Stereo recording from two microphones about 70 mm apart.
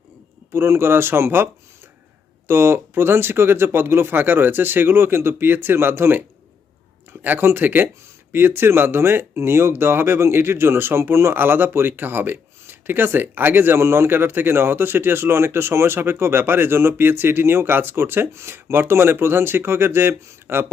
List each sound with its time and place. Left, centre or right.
0.5 s speech: right
2.5 s speech: right